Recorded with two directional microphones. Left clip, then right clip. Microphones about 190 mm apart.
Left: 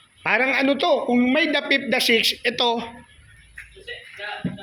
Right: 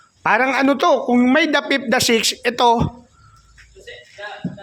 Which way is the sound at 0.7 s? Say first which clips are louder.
Right 4 dB; 40° right (ahead or behind).